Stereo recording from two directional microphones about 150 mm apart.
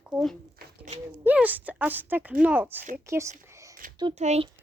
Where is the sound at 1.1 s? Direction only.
10° right (ahead or behind).